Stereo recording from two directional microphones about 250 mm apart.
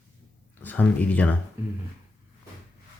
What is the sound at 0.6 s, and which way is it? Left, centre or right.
Speech, centre.